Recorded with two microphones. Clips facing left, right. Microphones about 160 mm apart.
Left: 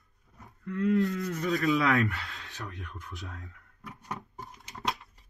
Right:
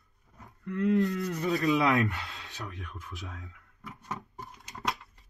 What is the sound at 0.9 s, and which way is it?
Rub, 15° right (ahead or behind).